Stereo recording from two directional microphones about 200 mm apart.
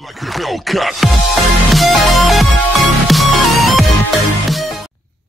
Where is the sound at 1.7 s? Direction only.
Centre (ahead or behind).